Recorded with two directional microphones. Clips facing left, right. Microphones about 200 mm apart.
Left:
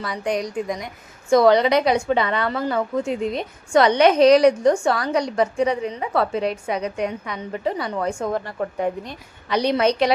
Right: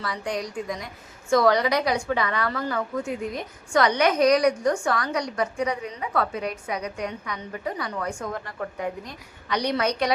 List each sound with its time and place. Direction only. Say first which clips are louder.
0.0 s a woman's voice: left 5 dB; 20° left (ahead or behind)